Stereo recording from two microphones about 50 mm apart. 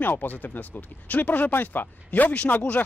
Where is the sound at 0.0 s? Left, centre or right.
Left.